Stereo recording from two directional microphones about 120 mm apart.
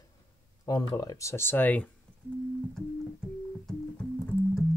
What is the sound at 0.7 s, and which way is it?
Speech, 30° left (ahead or behind).